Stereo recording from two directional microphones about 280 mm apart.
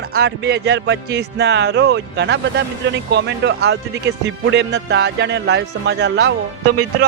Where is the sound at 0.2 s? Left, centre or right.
Right.